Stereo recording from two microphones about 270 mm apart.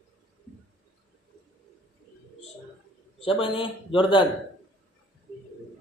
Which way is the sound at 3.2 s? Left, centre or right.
Centre.